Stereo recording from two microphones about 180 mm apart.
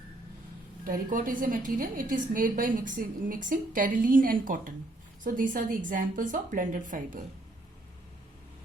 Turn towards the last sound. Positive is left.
turn(degrees=-45)  # may be behind; listen again after turning